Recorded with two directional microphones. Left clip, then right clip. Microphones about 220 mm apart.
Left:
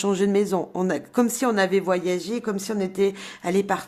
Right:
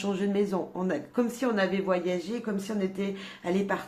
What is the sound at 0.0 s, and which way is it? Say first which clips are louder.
A woman's voice: left 7 dB; 45° left (ahead or behind).